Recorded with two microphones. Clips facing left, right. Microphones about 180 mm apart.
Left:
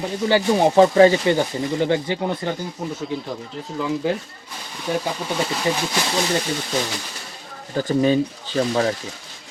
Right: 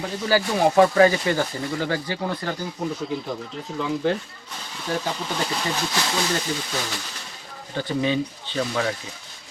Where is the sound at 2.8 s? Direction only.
5° left (ahead or behind).